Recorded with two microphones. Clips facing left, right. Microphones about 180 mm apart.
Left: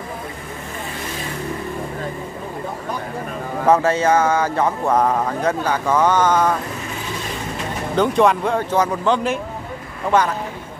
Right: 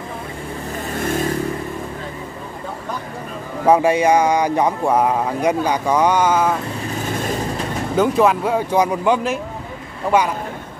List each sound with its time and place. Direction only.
0.9 s vehicle: 50° right (ahead or behind)
3.6 s speech: 10° right (ahead or behind)
7.1 s vehicle: 50° right (ahead or behind)
7.9 s speech: 5° right (ahead or behind)